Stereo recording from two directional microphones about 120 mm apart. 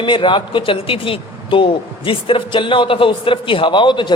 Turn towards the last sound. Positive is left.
turn(degrees=40)  # may be behind; listen again after turning